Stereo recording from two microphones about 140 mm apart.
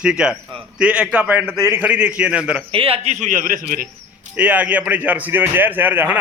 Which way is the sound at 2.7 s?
40° right (ahead or behind).